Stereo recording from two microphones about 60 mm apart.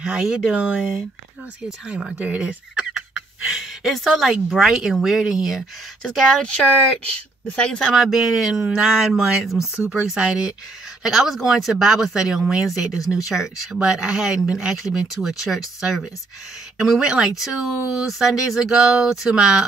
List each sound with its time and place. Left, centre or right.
0.0 s speech: centre
0.7 s speech: centre
3.5 s speech: centre
6.0 s speech: centre
7.9 s speech: centre